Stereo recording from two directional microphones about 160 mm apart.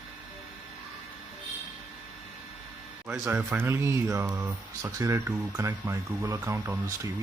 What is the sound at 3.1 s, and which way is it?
Speech, 10° right (ahead or behind).